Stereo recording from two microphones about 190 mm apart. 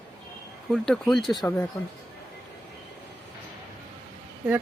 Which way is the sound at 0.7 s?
Centre (ahead or behind).